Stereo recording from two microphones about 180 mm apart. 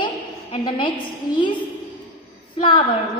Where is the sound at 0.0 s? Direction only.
30° left (ahead or behind).